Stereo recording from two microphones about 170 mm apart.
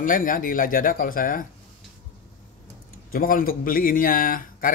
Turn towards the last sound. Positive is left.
turn(degrees=55)  # may be behind; listen again after turning